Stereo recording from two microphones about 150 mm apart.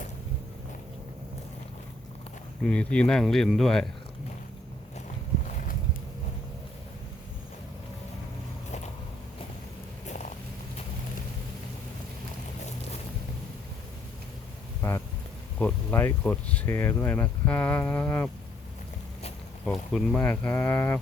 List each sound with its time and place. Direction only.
2.6 s speech: 5° left (ahead or behind)
14.8 s a sound: 15° left (ahead or behind)
15.5 s speech: 10° left (ahead or behind)
19.6 s speech: 5° left (ahead or behind)